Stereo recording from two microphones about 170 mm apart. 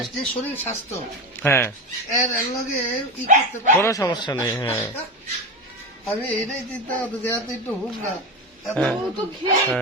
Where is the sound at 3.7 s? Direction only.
15° left (ahead or behind).